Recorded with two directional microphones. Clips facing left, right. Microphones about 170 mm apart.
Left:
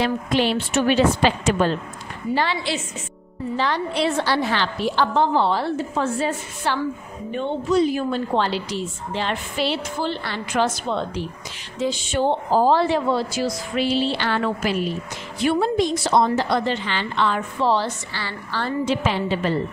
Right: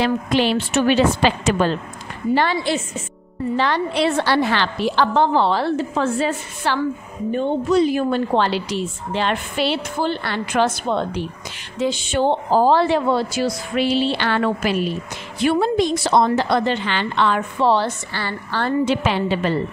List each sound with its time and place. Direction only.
0.0 s a woman's voice: 90° right
2.5 s a woman's voice: 50° right (ahead or behind)
3.5 s a woman's voice: 70° right (ahead or behind); by 6.8 s 90° right
7.7 s a woman's voice: 70° right (ahead or behind)
11.8 s a woman's voice: 70° right (ahead or behind)